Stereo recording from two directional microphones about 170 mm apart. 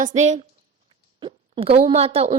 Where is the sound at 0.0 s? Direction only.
45° right (ahead or behind).